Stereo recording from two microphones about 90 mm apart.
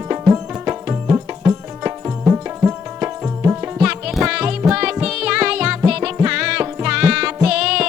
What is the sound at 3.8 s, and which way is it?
Music, 10° right (ahead or behind).